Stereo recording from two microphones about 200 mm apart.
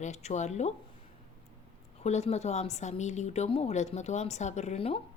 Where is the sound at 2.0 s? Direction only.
35° left (ahead or behind).